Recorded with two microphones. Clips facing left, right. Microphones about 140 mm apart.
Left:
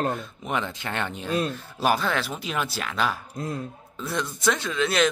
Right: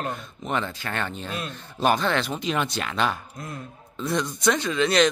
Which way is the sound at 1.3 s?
35° left (ahead or behind).